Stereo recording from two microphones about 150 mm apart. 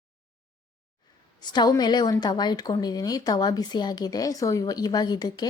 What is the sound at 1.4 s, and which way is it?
A woman's voice, 30° left (ahead or behind).